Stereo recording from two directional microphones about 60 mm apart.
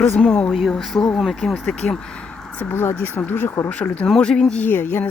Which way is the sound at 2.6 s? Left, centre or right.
Left.